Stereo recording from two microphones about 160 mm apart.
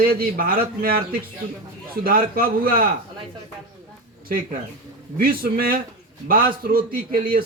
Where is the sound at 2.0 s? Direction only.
65° right (ahead or behind).